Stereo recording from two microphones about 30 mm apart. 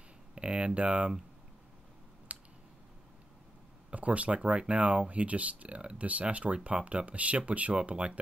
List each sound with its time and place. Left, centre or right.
0.3 s a sound: right
2.3 s a sound: right
3.9 s speech: right
4.4 s speech: right
5.8 s speech: right
6.0 s speech: right